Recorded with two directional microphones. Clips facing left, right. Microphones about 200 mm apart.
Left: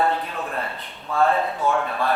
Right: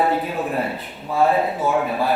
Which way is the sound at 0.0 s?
5° right (ahead or behind).